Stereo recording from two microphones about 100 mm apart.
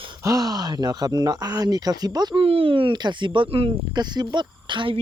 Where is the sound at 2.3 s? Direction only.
65° right (ahead or behind).